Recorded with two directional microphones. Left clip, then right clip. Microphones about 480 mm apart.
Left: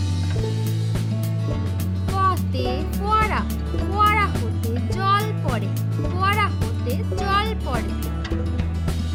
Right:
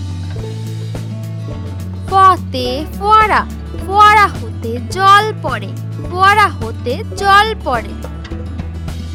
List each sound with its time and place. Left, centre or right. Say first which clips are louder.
2.1 s music: right 13 dB; centre
3.9 s a child's voice: right 12 dB; centre